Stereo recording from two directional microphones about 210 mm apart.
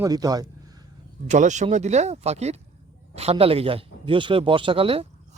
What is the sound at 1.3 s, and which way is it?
Speech, 35° right (ahead or behind).